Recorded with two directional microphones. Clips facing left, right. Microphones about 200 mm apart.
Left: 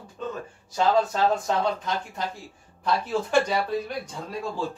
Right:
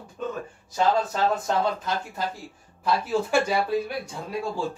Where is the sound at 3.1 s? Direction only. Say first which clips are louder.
Even; 10° right (ahead or behind).